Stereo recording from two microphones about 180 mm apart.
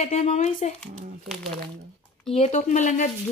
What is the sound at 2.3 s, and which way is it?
Speech, 35° left (ahead or behind).